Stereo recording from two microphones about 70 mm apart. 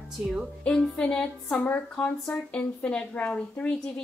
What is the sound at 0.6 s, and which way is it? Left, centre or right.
A woman's voice, centre.